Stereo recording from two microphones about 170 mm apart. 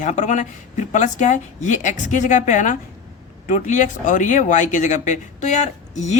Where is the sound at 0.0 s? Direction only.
45° left (ahead or behind).